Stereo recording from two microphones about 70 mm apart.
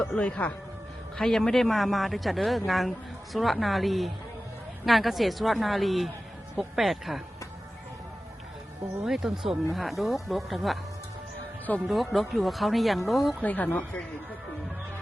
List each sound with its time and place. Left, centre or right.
0.0 s speech: centre
1.2 s speech: centre
9.0 s speech: centre
11.9 s speech: centre
13.4 s speech: left